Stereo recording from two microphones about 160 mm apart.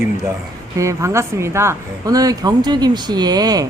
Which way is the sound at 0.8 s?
20° right (ahead or behind).